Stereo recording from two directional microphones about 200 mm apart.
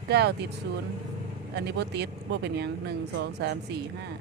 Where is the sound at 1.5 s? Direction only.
55° right (ahead or behind).